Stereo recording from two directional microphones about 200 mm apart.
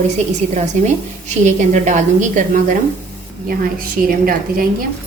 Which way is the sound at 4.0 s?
45° right (ahead or behind).